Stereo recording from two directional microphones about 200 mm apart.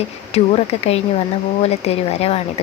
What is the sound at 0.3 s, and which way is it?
Speech, 30° left (ahead or behind).